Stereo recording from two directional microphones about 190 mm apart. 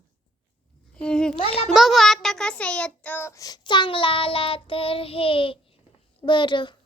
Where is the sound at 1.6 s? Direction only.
Centre (ahead or behind); by 6.7 s 25° left (ahead or behind).